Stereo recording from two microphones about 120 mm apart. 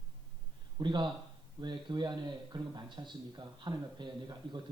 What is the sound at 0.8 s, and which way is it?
Speech, 40° right (ahead or behind).